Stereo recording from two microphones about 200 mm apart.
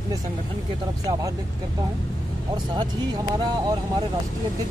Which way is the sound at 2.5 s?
20° right (ahead or behind).